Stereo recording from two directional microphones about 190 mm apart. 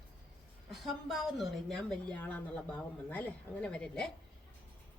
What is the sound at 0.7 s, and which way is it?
A woman's voice, centre (ahead or behind).